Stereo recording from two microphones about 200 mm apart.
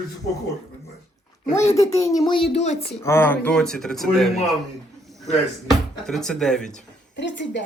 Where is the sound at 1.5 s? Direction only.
15° left (ahead or behind).